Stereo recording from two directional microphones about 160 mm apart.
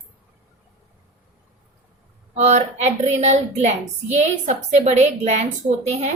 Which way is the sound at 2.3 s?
45° right (ahead or behind).